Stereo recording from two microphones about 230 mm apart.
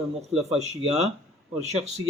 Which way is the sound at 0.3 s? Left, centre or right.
Right.